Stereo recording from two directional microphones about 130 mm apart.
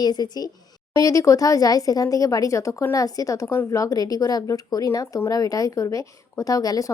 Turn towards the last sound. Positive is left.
turn(degrees=30)  # may be behind; listen again after turning